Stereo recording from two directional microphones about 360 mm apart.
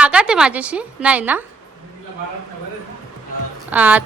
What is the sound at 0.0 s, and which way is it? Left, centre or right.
A woman's voice, centre.